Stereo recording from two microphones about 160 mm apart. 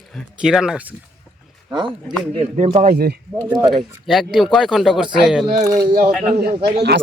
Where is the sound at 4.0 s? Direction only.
Centre (ahead or behind).